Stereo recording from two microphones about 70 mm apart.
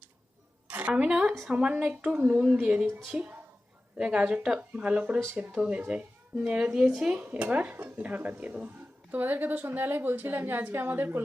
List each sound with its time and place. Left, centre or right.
0.7 s a woman's voice: right